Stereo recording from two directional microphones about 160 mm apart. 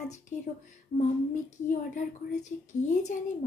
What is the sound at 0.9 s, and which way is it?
Speech, 45° left (ahead or behind).